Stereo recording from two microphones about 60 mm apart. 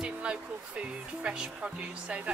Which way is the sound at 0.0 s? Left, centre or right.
Centre.